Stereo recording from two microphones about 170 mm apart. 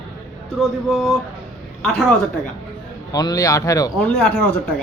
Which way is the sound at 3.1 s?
20° left (ahead or behind).